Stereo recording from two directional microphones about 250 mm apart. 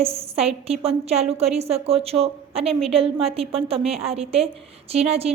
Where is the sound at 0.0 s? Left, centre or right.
Right.